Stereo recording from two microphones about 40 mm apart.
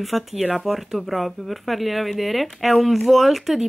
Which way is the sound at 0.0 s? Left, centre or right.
Centre.